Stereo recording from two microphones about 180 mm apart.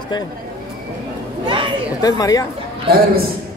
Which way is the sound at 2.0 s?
20° left (ahead or behind).